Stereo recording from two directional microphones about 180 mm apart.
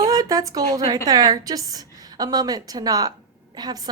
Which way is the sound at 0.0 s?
20° right (ahead or behind).